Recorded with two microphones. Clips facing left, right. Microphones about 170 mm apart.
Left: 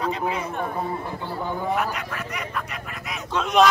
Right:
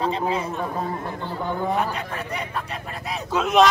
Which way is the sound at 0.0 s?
30° right (ahead or behind).